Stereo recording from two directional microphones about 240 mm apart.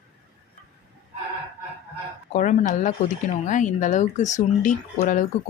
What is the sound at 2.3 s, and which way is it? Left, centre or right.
Speech, left.